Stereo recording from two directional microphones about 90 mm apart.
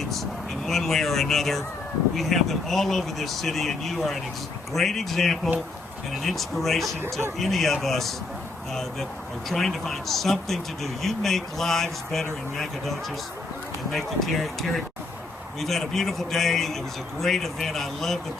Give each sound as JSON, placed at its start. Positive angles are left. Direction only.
{"t": 0.0, "sound": "speech", "side_deg": 0}
{"t": 7.0, "sound": "speech", "side_deg": -25}
{"t": 7.3, "sound": "speech", "side_deg": 0}
{"t": 13.9, "sound": "speech", "side_deg": 0}